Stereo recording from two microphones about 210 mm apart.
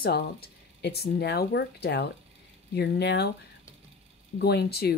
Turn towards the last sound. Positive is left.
turn(degrees=50)  # may be behind; listen again after turning